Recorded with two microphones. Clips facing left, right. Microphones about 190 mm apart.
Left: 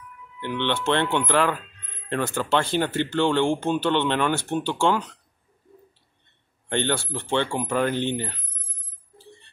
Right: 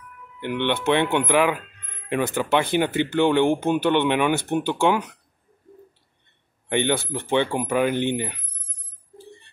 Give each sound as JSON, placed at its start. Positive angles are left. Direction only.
{"t": 0.4, "sound": "speech", "side_deg": -15}
{"t": 6.7, "sound": "speech", "side_deg": -15}